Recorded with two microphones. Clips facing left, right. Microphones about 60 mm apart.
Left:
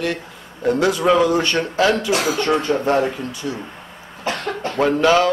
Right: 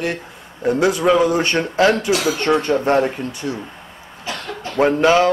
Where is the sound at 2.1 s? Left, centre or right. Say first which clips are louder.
Right 1 dB; left.